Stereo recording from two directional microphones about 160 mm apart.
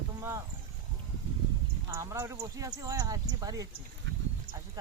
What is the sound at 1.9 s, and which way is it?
Speech, 15° right (ahead or behind).